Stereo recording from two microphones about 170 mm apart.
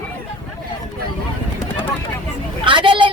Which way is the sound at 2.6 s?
30° right (ahead or behind).